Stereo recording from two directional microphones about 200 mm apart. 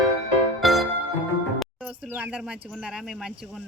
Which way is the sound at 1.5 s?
5° right (ahead or behind).